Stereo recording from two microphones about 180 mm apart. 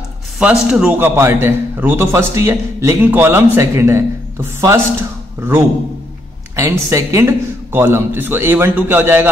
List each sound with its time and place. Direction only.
0.4 s a man's voice: 5° right (ahead or behind)
6.5 s a man's voice: 15° right (ahead or behind)